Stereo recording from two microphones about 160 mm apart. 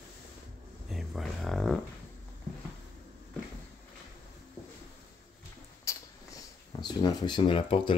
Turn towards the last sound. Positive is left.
turn(degrees=30)  # may be behind; listen again after turning